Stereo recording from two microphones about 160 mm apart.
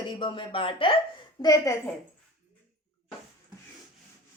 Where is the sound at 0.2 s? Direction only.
30° left (ahead or behind).